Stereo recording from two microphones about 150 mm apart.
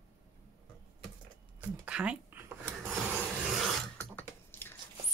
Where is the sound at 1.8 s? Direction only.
5° right (ahead or behind).